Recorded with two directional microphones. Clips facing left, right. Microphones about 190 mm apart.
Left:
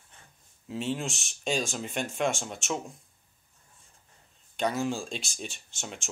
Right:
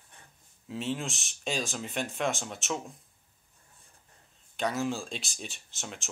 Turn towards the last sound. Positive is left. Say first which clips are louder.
# left 1 dB
turn(degrees=0)  # may be behind; listen again after turning